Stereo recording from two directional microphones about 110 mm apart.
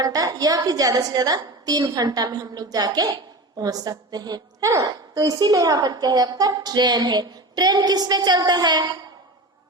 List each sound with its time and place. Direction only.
0.0 s a woman's voice: 35° right (ahead or behind)